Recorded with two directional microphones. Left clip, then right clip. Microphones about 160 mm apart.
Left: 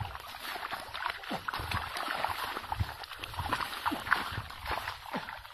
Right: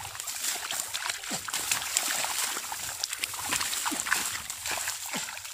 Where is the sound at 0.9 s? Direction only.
30° right (ahead or behind).